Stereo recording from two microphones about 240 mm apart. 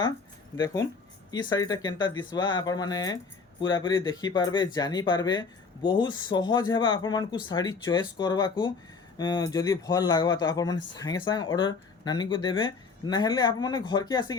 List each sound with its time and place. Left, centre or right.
0.5 s speech: centre